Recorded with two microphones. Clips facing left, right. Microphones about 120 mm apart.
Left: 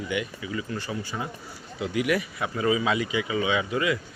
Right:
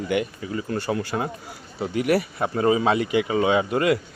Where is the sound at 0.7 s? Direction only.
65° right (ahead or behind).